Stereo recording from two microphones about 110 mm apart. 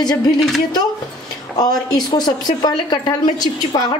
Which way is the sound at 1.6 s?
35° left (ahead or behind).